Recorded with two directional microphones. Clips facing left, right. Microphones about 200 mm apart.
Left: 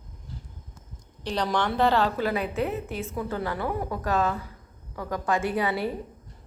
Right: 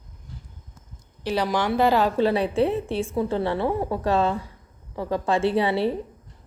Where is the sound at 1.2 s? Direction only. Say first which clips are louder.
Right 3 dB; 5° right (ahead or behind).